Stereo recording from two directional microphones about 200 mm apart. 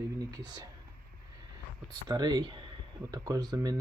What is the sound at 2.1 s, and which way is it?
Speech, 20° right (ahead or behind).